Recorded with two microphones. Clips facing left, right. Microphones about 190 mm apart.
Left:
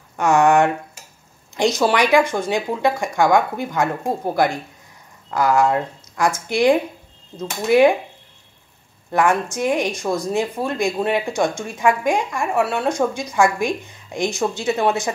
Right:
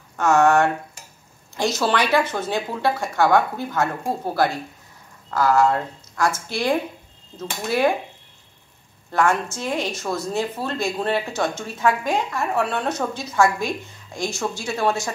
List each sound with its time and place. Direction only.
0.1 s speech: 15° left (ahead or behind)
1.8 s speech: 15° left (ahead or behind)
9.1 s speech: 15° left (ahead or behind)